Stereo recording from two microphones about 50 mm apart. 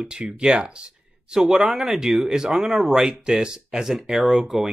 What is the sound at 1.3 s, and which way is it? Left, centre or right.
Speech, centre.